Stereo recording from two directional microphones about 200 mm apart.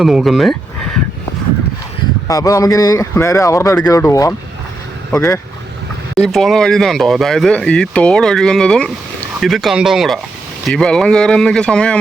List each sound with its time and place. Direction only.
0.0 s speech: centre (ahead or behind)
2.2 s speech: 15° left (ahead or behind)
6.1 s speech: centre (ahead or behind)